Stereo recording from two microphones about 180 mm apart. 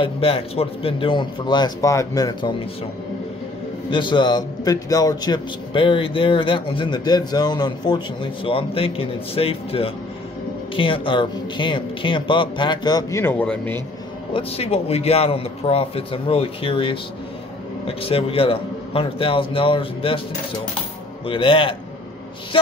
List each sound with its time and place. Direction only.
0.0 s a man's voice: 30° left (ahead or behind)
3.9 s a man's voice: 25° left (ahead or behind); by 13.7 s 10° left (ahead or behind)
14.3 s a man's voice: 35° left (ahead or behind)
21.3 s a man's voice: 30° left (ahead or behind)